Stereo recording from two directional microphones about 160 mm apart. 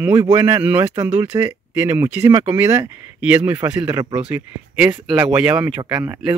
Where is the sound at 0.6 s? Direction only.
10° right (ahead or behind).